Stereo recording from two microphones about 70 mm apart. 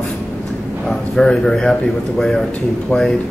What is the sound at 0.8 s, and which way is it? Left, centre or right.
Speech, centre.